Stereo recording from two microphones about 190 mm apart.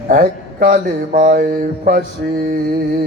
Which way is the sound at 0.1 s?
50° right (ahead or behind).